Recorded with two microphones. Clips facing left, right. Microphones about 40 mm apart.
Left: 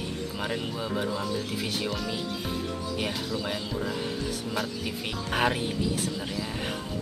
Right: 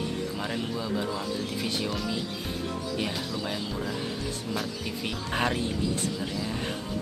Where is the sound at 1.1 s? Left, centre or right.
Centre.